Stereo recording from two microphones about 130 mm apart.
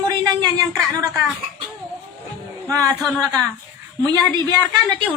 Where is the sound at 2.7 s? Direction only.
25° right (ahead or behind).